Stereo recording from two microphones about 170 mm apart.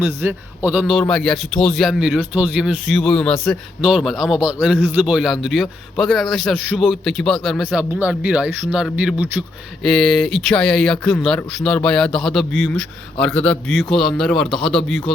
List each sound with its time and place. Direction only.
0.0 s speech: 10° right (ahead or behind)
7.8 s speech: 5° right (ahead or behind)